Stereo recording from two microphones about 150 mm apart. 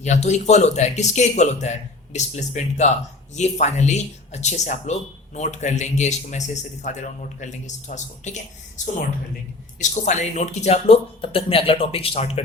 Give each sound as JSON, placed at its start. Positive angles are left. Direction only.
{"t": 0.0, "sound": "a woman's voice", "side_deg": 50}